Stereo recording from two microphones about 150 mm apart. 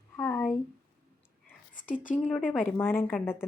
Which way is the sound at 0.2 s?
15° left (ahead or behind).